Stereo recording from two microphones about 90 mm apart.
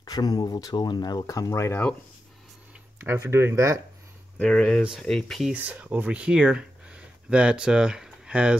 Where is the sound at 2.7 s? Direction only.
25° right (ahead or behind).